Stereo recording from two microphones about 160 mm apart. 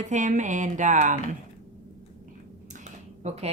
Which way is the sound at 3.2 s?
40° right (ahead or behind).